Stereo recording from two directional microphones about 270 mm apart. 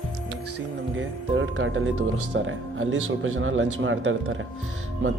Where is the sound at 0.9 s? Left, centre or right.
Right.